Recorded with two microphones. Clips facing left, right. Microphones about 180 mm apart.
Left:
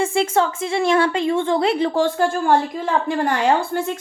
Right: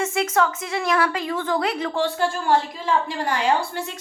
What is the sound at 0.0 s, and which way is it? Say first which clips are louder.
A woman's voice: left 3 dB; 30° left (ahead or behind).